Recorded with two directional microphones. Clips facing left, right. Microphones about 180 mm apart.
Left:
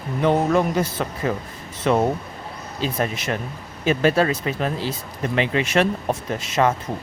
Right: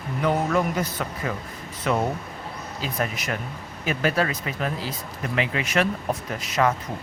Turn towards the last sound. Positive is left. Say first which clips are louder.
# left 3 dB
turn(degrees=25)  # may be behind; listen again after turning